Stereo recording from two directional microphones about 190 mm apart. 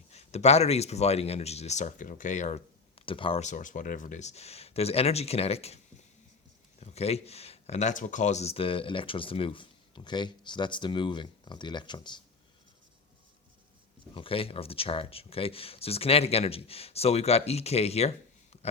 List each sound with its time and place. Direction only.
0.1 s speech: 35° left (ahead or behind)
14.1 s speech: 30° left (ahead or behind)
18.5 s a sound: 35° left (ahead or behind)